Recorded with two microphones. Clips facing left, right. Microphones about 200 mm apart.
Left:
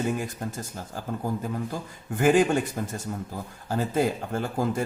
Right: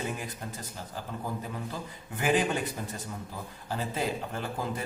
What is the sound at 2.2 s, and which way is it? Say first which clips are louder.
Speech: left 7 dB; 45° left (ahead or behind).